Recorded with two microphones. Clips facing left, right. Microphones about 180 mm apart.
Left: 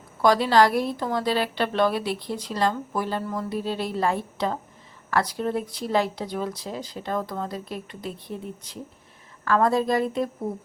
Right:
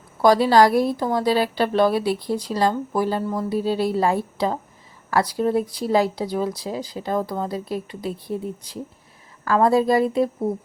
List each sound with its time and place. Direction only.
0.2 s a woman's voice: 35° right (ahead or behind)
9.9 s speech: 5° right (ahead or behind)